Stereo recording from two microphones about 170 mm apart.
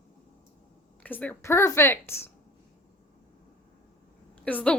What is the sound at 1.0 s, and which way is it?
A woman's voice, 10° left (ahead or behind).